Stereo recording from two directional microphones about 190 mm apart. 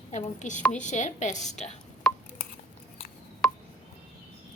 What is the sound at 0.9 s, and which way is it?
Speech, 40° left (ahead or behind).